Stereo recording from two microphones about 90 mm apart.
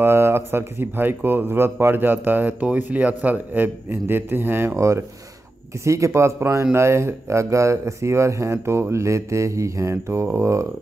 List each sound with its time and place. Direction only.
0.0 s speech: 25° right (ahead or behind)